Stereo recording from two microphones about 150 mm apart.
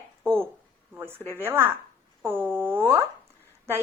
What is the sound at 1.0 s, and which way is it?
A woman's voice, 15° right (ahead or behind).